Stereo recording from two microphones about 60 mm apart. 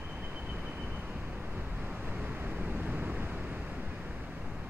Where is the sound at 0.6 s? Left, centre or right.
Centre.